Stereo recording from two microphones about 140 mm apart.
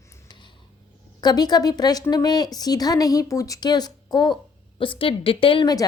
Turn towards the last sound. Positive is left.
turn(degrees=30)  # may be behind; listen again after turning